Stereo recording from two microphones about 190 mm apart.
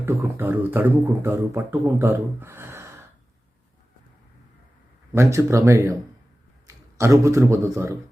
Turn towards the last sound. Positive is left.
turn(degrees=-15)  # may be behind; listen again after turning